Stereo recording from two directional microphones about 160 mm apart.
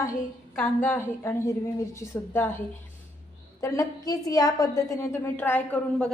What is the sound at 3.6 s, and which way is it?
A woman's voice, 20° left (ahead or behind).